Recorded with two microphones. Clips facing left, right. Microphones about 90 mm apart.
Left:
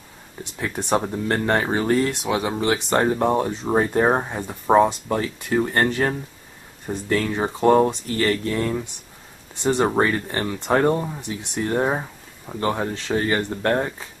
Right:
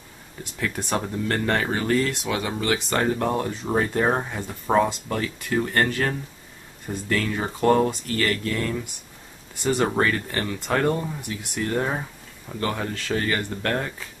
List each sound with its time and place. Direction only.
0.4 s speech: 20° left (ahead or behind)